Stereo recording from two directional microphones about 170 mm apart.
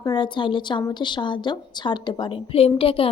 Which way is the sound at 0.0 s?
25° left (ahead or behind).